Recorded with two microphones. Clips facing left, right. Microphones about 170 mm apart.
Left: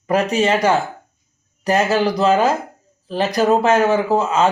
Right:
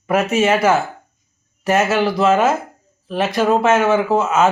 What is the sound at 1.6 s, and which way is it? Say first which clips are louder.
Speech: even; 5° right (ahead or behind).